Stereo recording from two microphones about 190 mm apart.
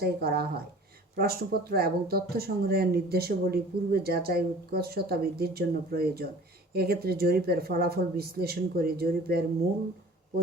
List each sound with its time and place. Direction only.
0.0 s speech: 55° right (ahead or behind)